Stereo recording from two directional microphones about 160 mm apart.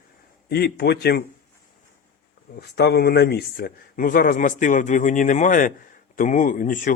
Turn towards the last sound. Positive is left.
turn(degrees=55)  # may be behind; listen again after turning